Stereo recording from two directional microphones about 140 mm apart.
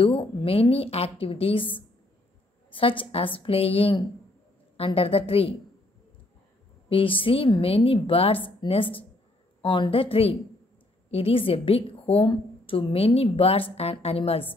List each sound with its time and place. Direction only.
0.0 s a woman's voice: 40° left (ahead or behind)
6.9 s a woman's voice: 40° left (ahead or behind)